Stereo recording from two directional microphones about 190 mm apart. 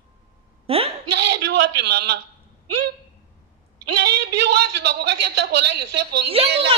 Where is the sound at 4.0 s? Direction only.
60° right (ahead or behind).